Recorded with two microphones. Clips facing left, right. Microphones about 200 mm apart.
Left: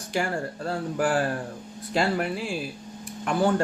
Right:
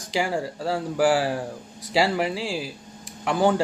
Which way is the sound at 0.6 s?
90° right.